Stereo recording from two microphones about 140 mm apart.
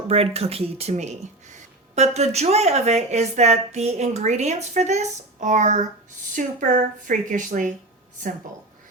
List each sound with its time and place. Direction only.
0.1 s speech: 45° right (ahead or behind)
6.3 s a woman's voice: 70° right (ahead or behind)